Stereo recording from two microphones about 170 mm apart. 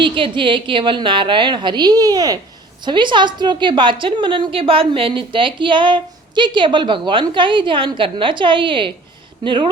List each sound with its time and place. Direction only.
0.0 s a woman's voice: 30° right (ahead or behind)